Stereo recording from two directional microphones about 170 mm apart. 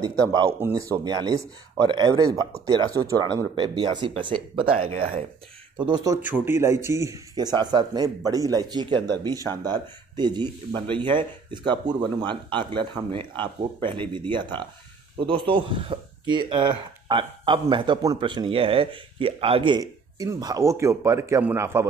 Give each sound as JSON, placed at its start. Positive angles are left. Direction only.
{"t": 0.3, "sound": "speech", "side_deg": -15}
{"t": 6.3, "sound": "speech", "side_deg": -15}